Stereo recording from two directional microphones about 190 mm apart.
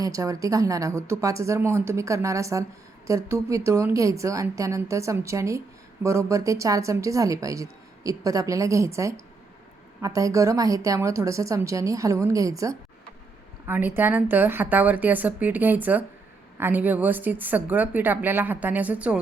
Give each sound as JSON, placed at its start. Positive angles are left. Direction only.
{"t": 0.0, "sound": "a woman's voice", "side_deg": -15}